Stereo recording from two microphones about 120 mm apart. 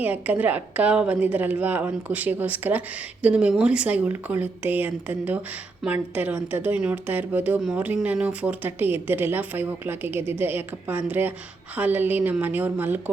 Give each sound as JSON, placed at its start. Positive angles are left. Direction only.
{"t": 0.0, "sound": "a woman's voice", "side_deg": -15}